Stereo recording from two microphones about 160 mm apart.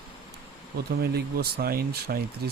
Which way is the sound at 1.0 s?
85° right.